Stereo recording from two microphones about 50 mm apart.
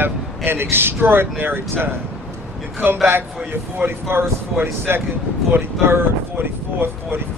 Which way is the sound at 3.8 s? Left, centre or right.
Right.